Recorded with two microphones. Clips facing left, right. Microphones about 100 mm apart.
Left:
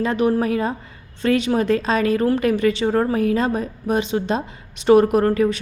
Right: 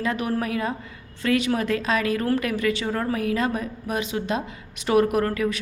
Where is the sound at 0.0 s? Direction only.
25° left (ahead or behind).